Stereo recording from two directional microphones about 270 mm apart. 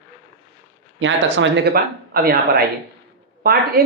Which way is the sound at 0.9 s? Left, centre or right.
Right.